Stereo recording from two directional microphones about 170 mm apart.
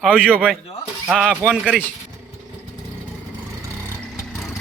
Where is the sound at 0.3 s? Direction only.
10° right (ahead or behind).